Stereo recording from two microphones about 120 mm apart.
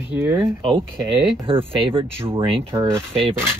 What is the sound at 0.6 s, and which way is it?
Speech, 45° right (ahead or behind).